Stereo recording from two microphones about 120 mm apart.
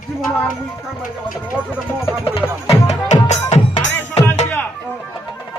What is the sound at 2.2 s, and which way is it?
Music, 55° left (ahead or behind).